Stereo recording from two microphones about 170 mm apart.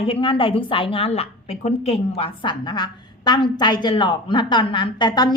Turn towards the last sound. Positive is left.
turn(degrees=25)  # may be behind; listen again after turning